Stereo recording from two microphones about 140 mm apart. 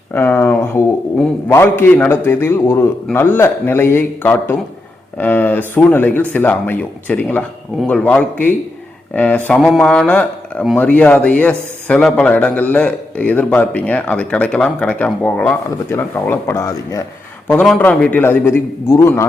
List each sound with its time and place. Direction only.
0.1 s a man's voice: 15° left (ahead or behind)
17.5 s a man's voice: 10° left (ahead or behind)